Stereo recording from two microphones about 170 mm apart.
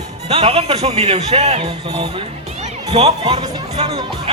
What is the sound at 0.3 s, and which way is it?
A man's voice, 35° right (ahead or behind).